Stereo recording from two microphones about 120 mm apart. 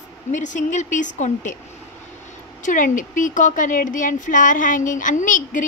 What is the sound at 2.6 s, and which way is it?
Speech, 90° left.